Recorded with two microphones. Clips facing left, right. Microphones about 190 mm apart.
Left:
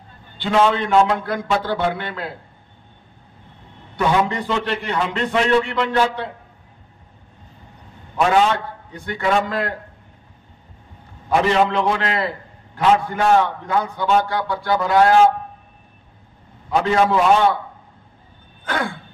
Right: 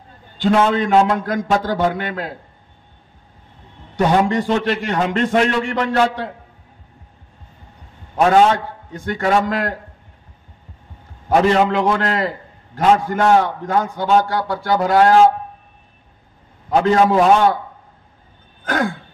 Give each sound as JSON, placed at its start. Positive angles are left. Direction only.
{"t": 0.4, "sound": "a man's voice", "side_deg": -45}
{"t": 3.9, "sound": "a man's voice", "side_deg": -45}
{"t": 8.2, "sound": "a man's voice", "side_deg": -45}
{"t": 11.2, "sound": "a man's voice", "side_deg": -45}
{"t": 16.6, "sound": "a man's voice", "side_deg": -40}
{"t": 18.6, "sound": "a sound", "side_deg": -45}